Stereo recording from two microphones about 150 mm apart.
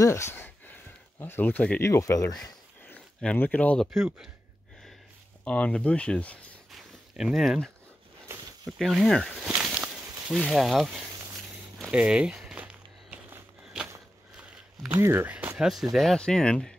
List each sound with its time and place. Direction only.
0.0 s a sound: 20° left (ahead or behind)
1.2 s speech: 10° left (ahead or behind)
1.8 s speech: 20° left (ahead or behind)
2.3 s speech: 10° left (ahead or behind)
5.4 s speech: 10° left (ahead or behind)
11.9 s walk: 5° right (ahead or behind)
14.9 s speech: 15° right (ahead or behind); by 16.7 s 5° left (ahead or behind)